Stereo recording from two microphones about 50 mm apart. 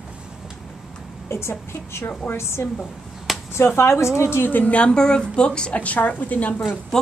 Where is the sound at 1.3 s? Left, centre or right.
Left.